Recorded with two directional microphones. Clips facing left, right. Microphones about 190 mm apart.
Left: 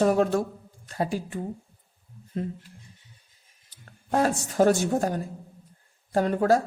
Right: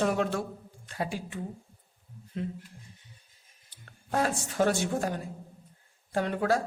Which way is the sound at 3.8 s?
35° left (ahead or behind).